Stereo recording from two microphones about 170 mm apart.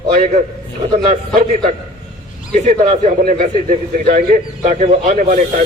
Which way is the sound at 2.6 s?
50° right (ahead or behind).